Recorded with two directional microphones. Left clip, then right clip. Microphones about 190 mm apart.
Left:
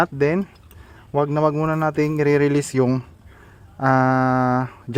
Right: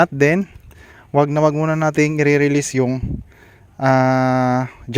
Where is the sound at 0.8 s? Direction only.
30° right (ahead or behind).